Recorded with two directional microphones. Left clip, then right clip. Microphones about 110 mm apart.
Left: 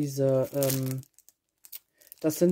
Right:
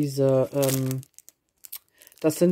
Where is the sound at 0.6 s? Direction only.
55° right (ahead or behind).